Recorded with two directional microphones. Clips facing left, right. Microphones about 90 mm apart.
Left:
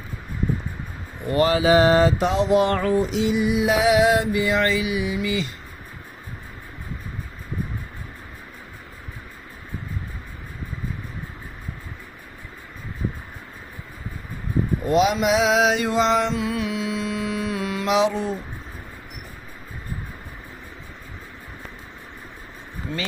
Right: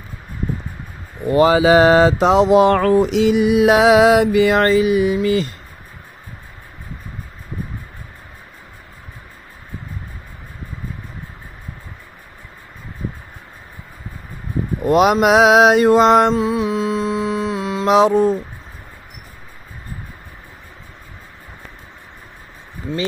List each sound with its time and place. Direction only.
1.7 s mantra: 90° right; by 4.6 s 70° right (ahead or behind)
4.6 s mantra: 45° right (ahead or behind)
14.9 s mantra: 60° right (ahead or behind)
16.3 s mantra: 30° right (ahead or behind)
17.8 s mantra: 45° right (ahead or behind)